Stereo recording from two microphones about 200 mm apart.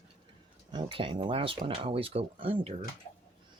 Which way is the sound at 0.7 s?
25° right (ahead or behind).